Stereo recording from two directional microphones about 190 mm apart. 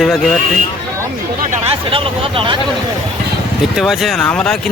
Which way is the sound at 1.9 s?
30° right (ahead or behind).